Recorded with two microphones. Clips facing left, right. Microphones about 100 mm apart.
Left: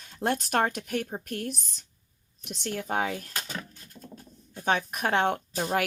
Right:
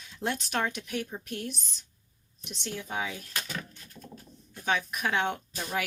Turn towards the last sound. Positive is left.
turn(degrees=50)  # may be behind; listen again after turning